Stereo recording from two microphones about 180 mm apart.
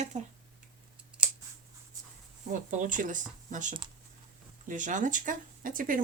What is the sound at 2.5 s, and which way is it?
Speech, 45° right (ahead or behind).